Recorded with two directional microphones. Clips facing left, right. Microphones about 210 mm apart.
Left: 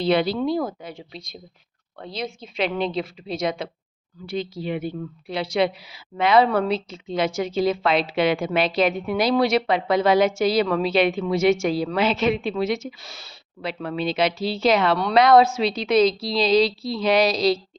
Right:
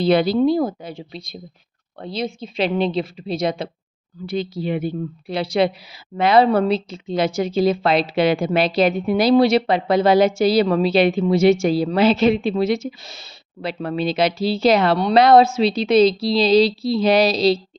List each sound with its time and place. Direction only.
0.0 s a woman's voice: 40° right (ahead or behind); by 13.3 s 20° right (ahead or behind)
13.6 s a woman's voice: 35° right (ahead or behind)